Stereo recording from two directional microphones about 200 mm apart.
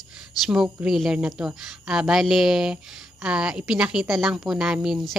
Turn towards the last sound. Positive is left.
turn(degrees=0)  # may be behind; listen again after turning